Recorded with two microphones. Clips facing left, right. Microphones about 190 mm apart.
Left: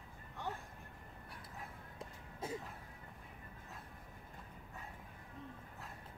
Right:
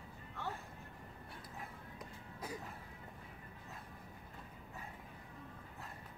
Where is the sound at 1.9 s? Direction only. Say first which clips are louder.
Left 3 dB; 25° left (ahead or behind).